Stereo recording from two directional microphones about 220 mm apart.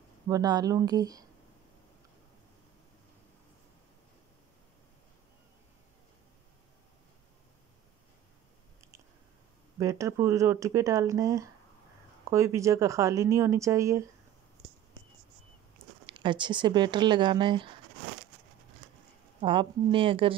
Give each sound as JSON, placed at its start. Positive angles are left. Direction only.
{"t": 0.3, "sound": "speech", "side_deg": -15}
{"t": 9.8, "sound": "speech", "side_deg": -15}
{"t": 16.1, "sound": "speech", "side_deg": -20}
{"t": 19.4, "sound": "speech", "side_deg": -20}